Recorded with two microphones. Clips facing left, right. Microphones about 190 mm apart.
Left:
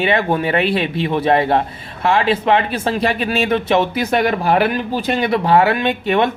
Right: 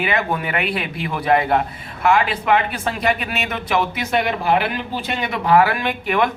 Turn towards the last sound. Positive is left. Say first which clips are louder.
# left 4 dB
turn(degrees=25)  # may be behind; listen again after turning